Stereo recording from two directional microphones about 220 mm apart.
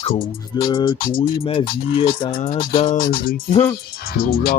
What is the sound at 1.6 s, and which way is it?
Music, 40° left (ahead or behind).